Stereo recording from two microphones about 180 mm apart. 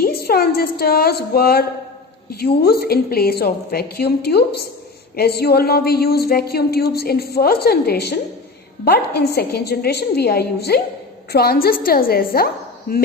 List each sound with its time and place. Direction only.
0.0 s a woman's voice: 60° left (ahead or behind)